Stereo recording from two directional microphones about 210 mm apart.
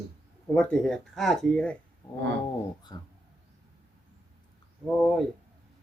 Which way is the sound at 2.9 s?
20° left (ahead or behind).